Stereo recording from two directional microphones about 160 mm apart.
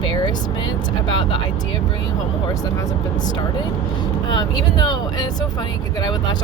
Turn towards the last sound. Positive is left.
turn(degrees=25)  # may be behind; listen again after turning